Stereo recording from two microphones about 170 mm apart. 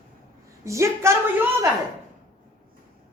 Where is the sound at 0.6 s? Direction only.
15° right (ahead or behind).